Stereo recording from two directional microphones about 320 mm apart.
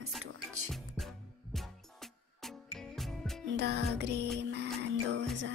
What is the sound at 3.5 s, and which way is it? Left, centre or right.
Music, right.